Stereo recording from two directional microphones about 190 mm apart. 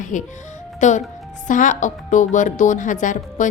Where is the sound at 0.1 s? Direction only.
40° left (ahead or behind).